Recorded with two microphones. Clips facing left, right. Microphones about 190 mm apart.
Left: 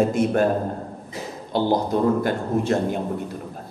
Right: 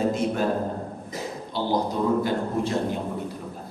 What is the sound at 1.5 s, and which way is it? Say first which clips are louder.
A man's voice: left 5 dB; 55° left (ahead or behind).